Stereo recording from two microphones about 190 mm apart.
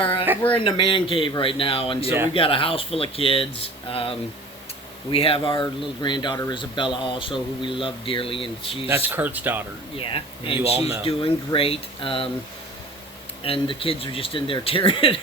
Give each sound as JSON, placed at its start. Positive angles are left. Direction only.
{"t": 0.5, "sound": "speech", "side_deg": 25}
{"t": 8.9, "sound": "speech", "side_deg": -10}
{"t": 10.0, "sound": "speech", "side_deg": 25}
{"t": 13.4, "sound": "speech", "side_deg": 30}